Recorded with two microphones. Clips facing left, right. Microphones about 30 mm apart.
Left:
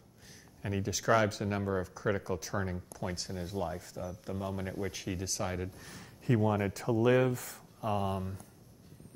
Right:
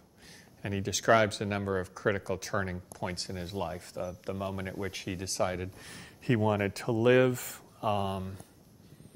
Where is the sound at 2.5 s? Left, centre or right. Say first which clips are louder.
Right 3 dB; right.